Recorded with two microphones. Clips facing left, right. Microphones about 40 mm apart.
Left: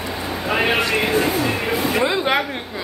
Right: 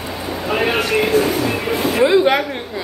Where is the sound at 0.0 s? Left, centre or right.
Centre.